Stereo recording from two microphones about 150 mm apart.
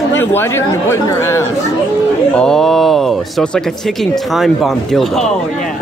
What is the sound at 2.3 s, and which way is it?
Speech, 5° left (ahead or behind).